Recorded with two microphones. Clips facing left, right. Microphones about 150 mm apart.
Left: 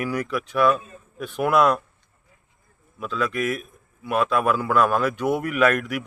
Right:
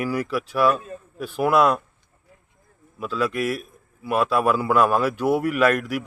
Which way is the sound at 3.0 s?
5° right (ahead or behind).